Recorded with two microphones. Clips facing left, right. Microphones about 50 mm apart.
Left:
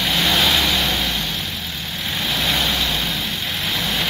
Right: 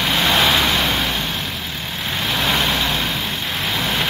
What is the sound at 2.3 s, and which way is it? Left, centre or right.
Vehicle, right.